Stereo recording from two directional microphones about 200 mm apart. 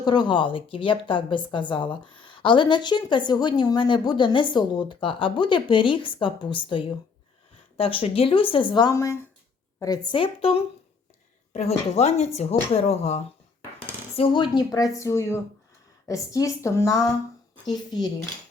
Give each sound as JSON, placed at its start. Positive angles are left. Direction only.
{"t": 0.0, "sound": "a woman's voice", "side_deg": 20}
{"t": 14.2, "sound": "a woman's voice", "side_deg": 20}